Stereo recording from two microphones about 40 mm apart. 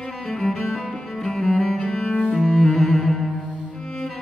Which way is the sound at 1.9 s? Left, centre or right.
Left.